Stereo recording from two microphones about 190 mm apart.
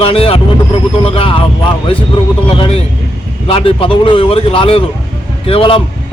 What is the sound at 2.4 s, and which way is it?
A man's voice, 25° left (ahead or behind).